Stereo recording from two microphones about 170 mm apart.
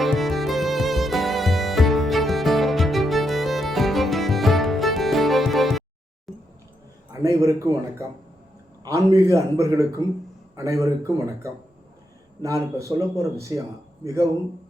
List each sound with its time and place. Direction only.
0.0 s music: centre (ahead or behind)
7.1 s a man's voice: 20° right (ahead or behind)